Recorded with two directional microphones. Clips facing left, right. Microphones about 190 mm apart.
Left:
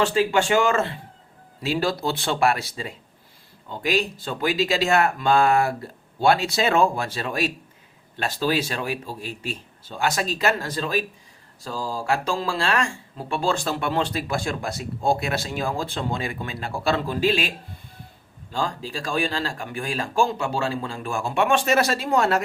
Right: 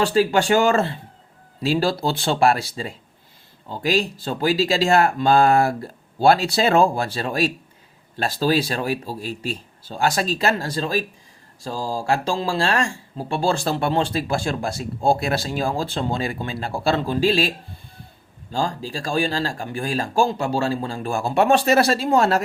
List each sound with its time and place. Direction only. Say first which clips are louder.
0.0 s speech: right 2 dB; 35° right (ahead or behind)
18.5 s speech: right 3 dB; 35° right (ahead or behind)